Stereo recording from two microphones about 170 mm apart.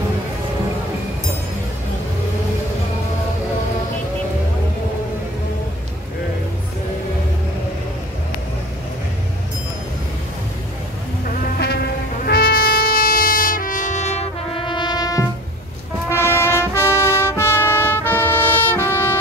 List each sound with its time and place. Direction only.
12.3 s trumpet: 60° left (ahead or behind); by 14.6 s 40° left (ahead or behind)
14.7 s brass instrument: 25° left (ahead or behind)
16.1 s trumpet: 15° left (ahead or behind)